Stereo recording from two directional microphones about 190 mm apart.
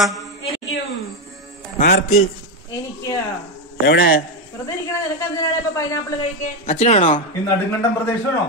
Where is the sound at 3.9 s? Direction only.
65° left (ahead or behind).